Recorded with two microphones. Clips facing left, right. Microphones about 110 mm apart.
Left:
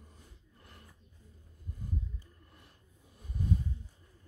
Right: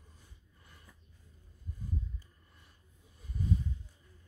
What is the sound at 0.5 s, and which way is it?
Dog, 70° left (ahead or behind).